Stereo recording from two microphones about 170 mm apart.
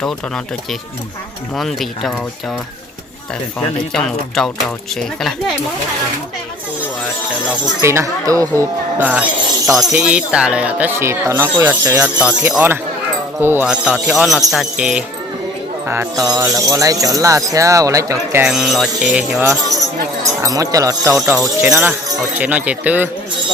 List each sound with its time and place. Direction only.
1.5 s speech: centre (ahead or behind)
3.9 s speech: 5° left (ahead or behind)
7.4 s speech: 15° right (ahead or behind)
9.0 s speech: 10° right (ahead or behind)
15.9 s speech: 20° right (ahead or behind)
18.4 s speech: centre (ahead or behind)
20.4 s speech: 20° right (ahead or behind)
21.1 s speech: centre (ahead or behind)